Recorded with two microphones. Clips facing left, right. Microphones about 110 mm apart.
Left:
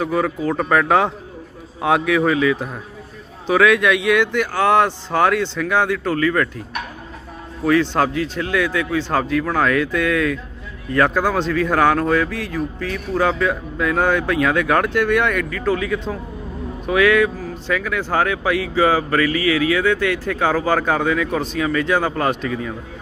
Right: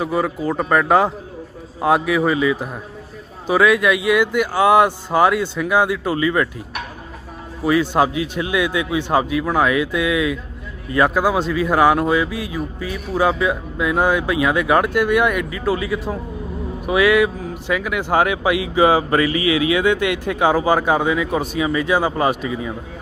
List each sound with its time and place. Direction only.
0.0 s speech: 5° right (ahead or behind)
7.6 s speech: 10° right (ahead or behind)